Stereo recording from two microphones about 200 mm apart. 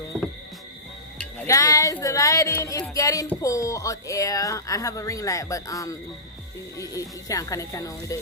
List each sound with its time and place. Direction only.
1.2 s speech: 15° left (ahead or behind)